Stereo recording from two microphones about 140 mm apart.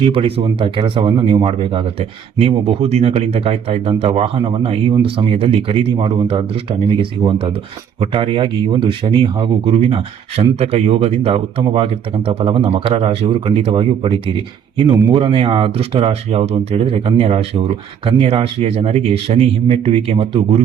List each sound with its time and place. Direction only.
0.0 s speech: 40° right (ahead or behind)